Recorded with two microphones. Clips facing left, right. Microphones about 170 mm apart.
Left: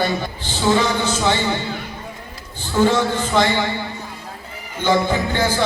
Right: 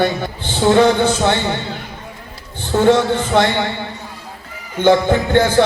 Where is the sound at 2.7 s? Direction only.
60° right (ahead or behind).